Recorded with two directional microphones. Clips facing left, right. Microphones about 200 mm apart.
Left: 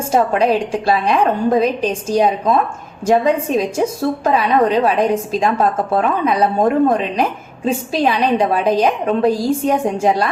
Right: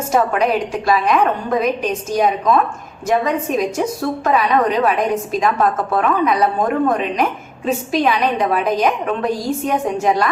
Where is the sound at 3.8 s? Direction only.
30° left (ahead or behind).